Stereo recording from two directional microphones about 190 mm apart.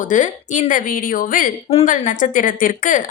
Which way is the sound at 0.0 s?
40° left (ahead or behind).